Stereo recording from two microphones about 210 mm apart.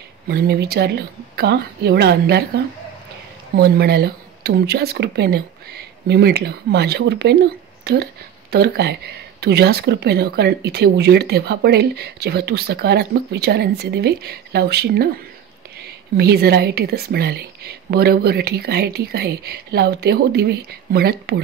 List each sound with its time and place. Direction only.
0.3 s speech: 50° right (ahead or behind)
16.2 s speech: 50° right (ahead or behind)